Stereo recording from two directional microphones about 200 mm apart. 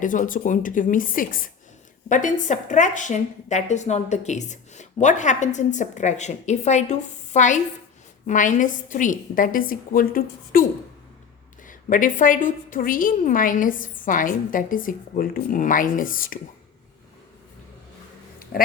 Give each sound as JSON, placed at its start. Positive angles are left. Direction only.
{"t": 0.0, "sound": "a woman's voice", "side_deg": 40}